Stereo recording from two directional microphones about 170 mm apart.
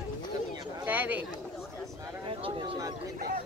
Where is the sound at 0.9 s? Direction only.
10° right (ahead or behind).